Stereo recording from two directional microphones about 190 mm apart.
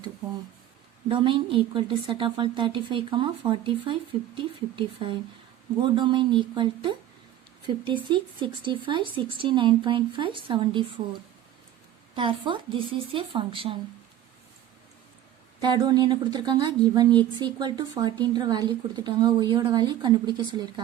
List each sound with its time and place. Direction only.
1.0 s a woman's voice: 25° right (ahead or behind)
8.1 s a woman's voice: 25° right (ahead or behind)
12.1 s a woman's voice: 25° right (ahead or behind)
15.6 s a woman's voice: 20° right (ahead or behind)